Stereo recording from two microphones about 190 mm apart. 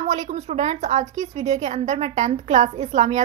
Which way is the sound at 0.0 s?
35° right (ahead or behind).